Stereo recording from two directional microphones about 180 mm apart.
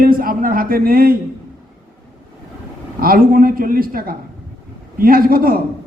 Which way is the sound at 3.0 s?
55° right (ahead or behind).